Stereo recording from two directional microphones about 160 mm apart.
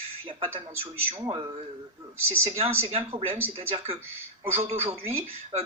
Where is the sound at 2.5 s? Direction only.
40° right (ahead or behind).